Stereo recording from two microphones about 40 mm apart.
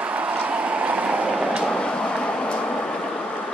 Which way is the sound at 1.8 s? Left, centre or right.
Left.